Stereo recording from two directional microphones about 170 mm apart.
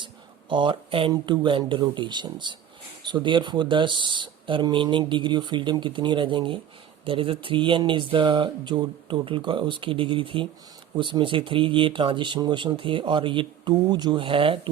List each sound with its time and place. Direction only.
0.5 s speech: 30° right (ahead or behind)